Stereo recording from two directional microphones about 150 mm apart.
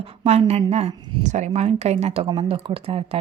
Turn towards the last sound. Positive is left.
turn(degrees=-40)  # may be behind; listen again after turning